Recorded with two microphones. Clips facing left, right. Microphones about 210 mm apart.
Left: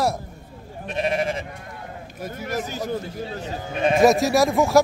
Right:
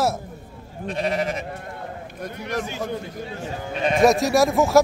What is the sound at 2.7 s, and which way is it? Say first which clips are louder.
Speech: left 1 dB; 35° left (ahead or behind).